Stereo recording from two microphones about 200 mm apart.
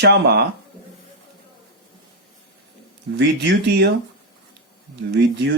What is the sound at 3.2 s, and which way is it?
Speech, 60° right (ahead or behind).